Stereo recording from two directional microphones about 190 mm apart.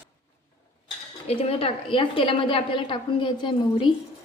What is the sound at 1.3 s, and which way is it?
A woman's voice, 30° left (ahead or behind).